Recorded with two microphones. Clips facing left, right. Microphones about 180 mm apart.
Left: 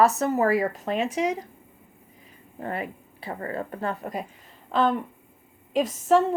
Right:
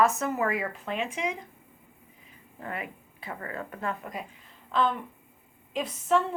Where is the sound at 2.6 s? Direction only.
35° left (ahead or behind).